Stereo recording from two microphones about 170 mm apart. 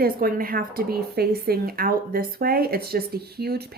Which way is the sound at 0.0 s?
60° right (ahead or behind).